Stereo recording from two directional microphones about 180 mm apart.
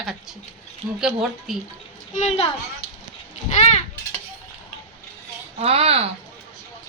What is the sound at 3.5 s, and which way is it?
Children playing, 40° left (ahead or behind).